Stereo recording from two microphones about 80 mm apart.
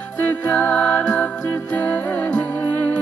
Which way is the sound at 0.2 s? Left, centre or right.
Left.